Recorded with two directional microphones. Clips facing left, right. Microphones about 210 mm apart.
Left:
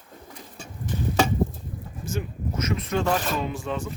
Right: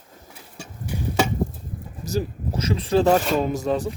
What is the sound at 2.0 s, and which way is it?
Speech, 35° right (ahead or behind).